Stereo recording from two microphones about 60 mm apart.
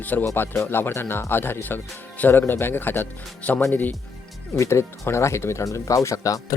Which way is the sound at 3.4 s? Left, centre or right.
Left.